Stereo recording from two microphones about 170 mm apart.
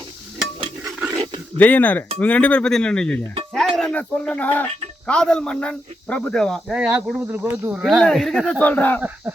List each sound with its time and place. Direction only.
0.9 s stir: 5° right (ahead or behind)
1.1 s a sound: 30° right (ahead or behind)
1.5 s speech: 10° left (ahead or behind)
6.7 s speech: 5° right (ahead or behind)
7.8 s speech: centre (ahead or behind)
9.0 s speech: 10° right (ahead or behind)